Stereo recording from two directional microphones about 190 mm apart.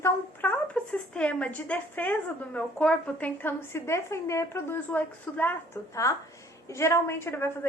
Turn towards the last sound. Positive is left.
turn(degrees=15)  # may be behind; listen again after turning